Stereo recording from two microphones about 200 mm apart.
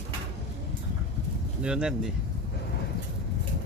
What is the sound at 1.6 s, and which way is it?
Speech, 5° right (ahead or behind).